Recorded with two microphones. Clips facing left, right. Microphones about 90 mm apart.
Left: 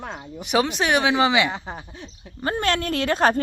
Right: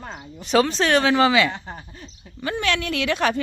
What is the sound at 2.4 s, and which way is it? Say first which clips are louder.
A woman's voice: left 1 dB; 40° left (ahead or behind).